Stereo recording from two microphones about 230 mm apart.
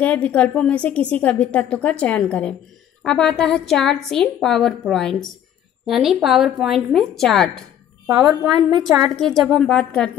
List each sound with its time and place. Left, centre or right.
0.0 s a woman's voice: centre
8.3 s a woman's voice: centre
9.1 s a woman's voice: centre